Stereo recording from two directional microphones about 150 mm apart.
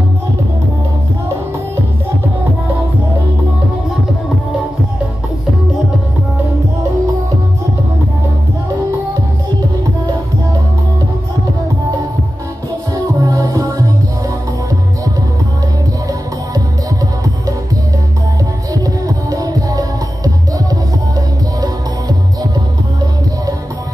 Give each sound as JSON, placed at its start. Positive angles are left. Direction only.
{"t": 12.9, "sound": "music", "side_deg": -25}
{"t": 18.7, "sound": "music", "side_deg": -25}